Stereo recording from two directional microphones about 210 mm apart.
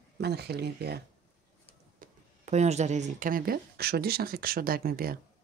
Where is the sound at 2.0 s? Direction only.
35° right (ahead or behind).